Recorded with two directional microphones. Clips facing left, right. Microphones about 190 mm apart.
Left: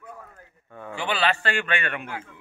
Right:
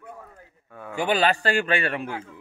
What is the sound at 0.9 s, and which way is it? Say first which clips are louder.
A man's voice: right 4 dB; 45° right (ahead or behind).